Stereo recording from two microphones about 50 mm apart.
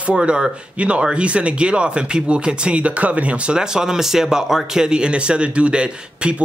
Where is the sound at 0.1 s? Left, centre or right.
Centre.